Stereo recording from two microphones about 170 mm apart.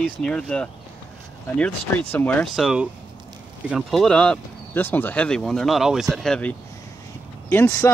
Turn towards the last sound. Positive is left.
turn(degrees=15)  # may be behind; listen again after turning